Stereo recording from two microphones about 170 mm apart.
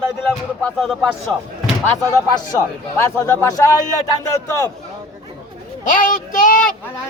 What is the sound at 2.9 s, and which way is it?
A man's voice, 15° left (ahead or behind).